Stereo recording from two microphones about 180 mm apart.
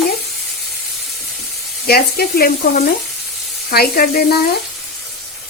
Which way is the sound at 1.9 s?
60° left (ahead or behind).